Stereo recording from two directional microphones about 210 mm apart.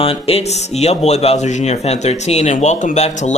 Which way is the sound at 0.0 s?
25° left (ahead or behind).